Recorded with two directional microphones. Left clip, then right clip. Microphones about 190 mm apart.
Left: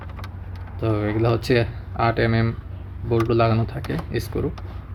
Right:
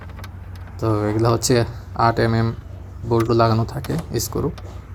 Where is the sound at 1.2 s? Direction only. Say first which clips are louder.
Right 1 dB; 15° right (ahead or behind).